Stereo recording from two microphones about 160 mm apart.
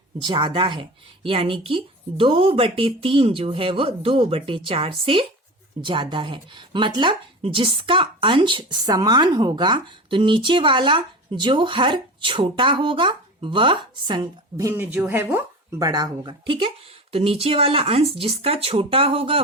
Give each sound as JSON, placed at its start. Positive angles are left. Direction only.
{"t": 0.2, "sound": "speech", "side_deg": -30}